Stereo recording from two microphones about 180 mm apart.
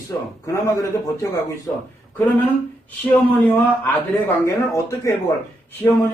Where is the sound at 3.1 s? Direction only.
10° left (ahead or behind).